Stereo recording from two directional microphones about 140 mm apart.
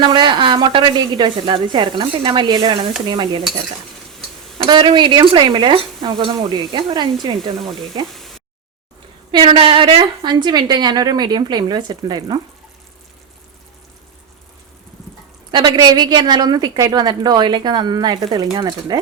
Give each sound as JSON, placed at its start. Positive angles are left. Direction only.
{"t": 0.0, "sound": "a woman's voice", "side_deg": -35}
{"t": 4.7, "sound": "a woman's voice", "side_deg": -35}
{"t": 9.3, "sound": "a woman's voice", "side_deg": -40}
{"t": 15.5, "sound": "a woman's voice", "side_deg": -30}